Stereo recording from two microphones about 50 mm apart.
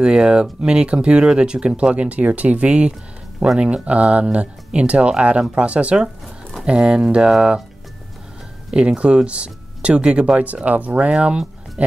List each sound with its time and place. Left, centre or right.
0.0 s speech: centre
8.7 s speech: right